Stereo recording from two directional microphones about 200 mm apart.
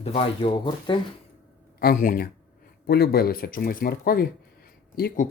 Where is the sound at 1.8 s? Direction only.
45° left (ahead or behind).